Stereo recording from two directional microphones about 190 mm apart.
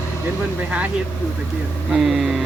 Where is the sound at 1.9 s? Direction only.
Centre (ahead or behind).